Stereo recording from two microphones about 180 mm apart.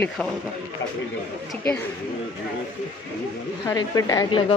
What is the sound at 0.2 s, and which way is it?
Speech, 5° left (ahead or behind).